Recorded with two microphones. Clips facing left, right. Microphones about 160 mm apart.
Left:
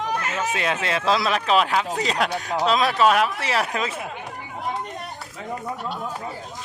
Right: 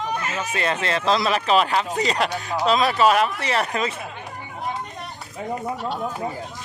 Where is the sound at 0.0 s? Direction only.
80° left.